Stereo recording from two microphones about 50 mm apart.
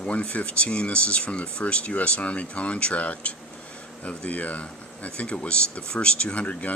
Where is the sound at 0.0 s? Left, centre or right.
Left.